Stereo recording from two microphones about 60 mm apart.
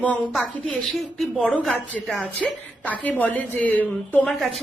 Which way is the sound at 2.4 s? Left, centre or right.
Left.